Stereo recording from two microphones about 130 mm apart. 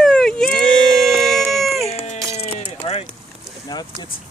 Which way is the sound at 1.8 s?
60° left (ahead or behind).